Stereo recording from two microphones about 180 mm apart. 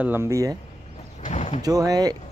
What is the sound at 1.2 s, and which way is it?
Vehicle, 40° left (ahead or behind).